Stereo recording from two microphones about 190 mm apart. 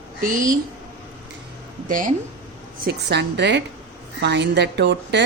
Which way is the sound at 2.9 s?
60° right (ahead or behind).